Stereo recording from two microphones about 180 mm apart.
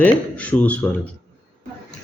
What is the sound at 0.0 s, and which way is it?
Speech, 10° left (ahead or behind).